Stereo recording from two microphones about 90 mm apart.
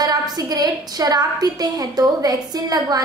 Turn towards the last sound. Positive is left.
turn(degrees=-45)  # may be behind; listen again after turning